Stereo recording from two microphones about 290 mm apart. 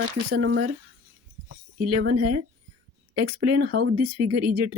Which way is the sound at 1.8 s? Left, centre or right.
Right.